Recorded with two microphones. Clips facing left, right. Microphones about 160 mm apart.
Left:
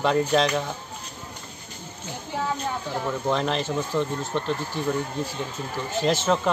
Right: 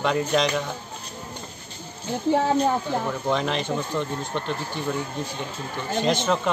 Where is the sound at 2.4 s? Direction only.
55° right (ahead or behind).